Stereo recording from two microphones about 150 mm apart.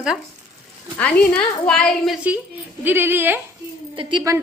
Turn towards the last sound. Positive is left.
turn(degrees=-35)  # may be behind; listen again after turning